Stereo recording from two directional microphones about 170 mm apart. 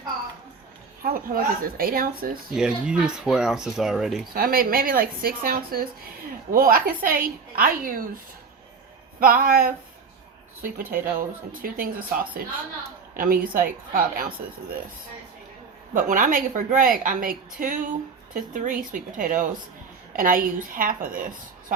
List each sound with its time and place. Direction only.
1.0 s a woman's voice: 60° right (ahead or behind)
2.5 s speech: 5° right (ahead or behind)
4.4 s a woman's voice: 60° right (ahead or behind)
9.2 s a woman's voice: 55° right (ahead or behind)
16.0 s a woman's voice: 50° right (ahead or behind)